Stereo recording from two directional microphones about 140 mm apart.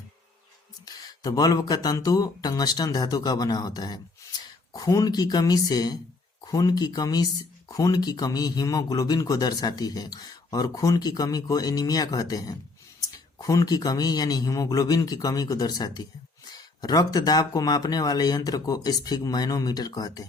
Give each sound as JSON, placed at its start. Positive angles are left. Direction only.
{"t": 0.7, "sound": "speech", "side_deg": 30}